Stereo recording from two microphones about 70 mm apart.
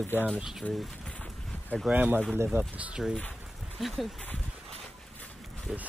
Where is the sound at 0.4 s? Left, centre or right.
Centre.